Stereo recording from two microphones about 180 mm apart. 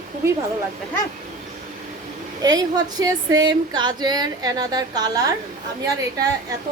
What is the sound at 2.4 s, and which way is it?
A woman's voice, 20° right (ahead or behind).